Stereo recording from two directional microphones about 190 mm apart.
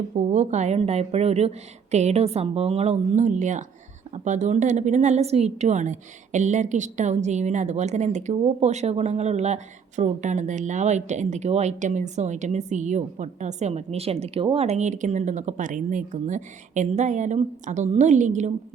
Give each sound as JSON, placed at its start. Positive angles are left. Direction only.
{"t": 0.2, "sound": "a woman's voice", "side_deg": -40}